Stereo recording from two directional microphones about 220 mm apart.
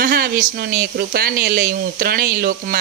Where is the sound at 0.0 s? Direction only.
45° right (ahead or behind).